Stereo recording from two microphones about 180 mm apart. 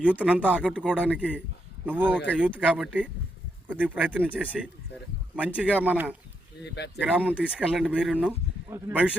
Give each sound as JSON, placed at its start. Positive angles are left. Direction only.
{"t": 0.0, "sound": "a man's voice", "side_deg": -5}
{"t": 6.6, "sound": "speech", "side_deg": 70}
{"t": 7.0, "sound": "a man's voice", "side_deg": -10}